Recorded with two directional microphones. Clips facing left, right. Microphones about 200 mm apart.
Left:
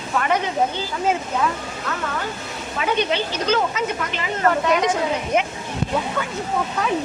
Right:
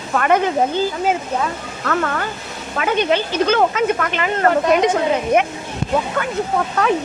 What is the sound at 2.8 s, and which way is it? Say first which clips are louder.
Speech: right 4 dB; 55° right (ahead or behind).